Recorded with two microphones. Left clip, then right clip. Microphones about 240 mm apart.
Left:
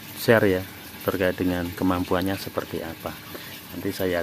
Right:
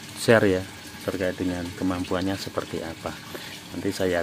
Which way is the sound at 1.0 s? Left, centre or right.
Centre.